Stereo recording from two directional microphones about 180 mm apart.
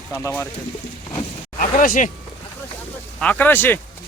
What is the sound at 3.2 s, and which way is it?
Speech, 10° left (ahead or behind).